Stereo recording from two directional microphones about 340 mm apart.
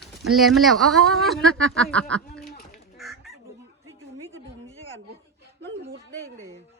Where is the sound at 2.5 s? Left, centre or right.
Left.